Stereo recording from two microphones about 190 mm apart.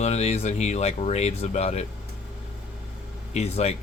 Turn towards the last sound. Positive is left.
turn(degrees=35)  # may be behind; listen again after turning